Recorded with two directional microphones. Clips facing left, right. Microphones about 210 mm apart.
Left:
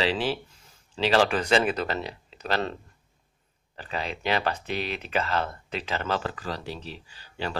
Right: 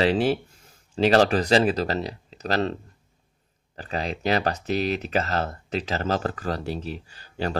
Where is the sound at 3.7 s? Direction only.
40° right (ahead or behind).